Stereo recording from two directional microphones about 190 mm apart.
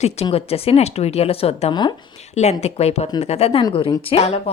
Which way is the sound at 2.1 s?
35° left (ahead or behind).